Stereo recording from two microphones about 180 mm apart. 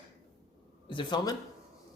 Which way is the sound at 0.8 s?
25° left (ahead or behind).